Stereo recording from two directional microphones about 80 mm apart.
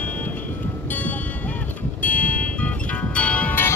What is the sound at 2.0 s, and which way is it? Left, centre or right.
Music, centre.